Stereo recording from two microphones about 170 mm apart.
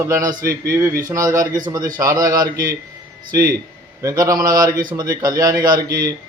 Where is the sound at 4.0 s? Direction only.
20° right (ahead or behind).